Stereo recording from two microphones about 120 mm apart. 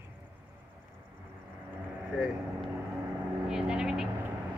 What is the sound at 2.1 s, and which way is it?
Speech, 5° right (ahead or behind).